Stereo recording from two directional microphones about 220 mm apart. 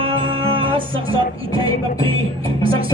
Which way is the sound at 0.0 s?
25° right (ahead or behind).